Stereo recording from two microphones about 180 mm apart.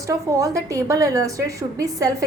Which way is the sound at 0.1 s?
20° right (ahead or behind).